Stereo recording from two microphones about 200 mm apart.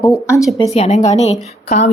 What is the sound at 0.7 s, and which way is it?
Speech, 35° left (ahead or behind).